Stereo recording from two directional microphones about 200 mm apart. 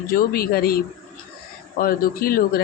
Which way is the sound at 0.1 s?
50° left (ahead or behind).